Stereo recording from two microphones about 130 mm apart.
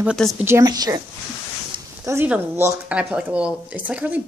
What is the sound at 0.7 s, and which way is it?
Speech, 30° right (ahead or behind).